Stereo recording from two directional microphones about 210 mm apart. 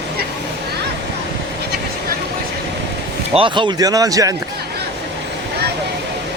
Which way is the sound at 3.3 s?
25° right (ahead or behind).